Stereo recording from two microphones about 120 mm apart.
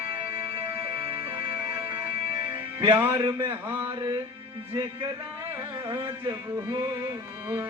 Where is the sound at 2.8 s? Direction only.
20° right (ahead or behind).